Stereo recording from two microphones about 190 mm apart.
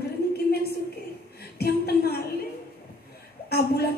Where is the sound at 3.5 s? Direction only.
55° left (ahead or behind).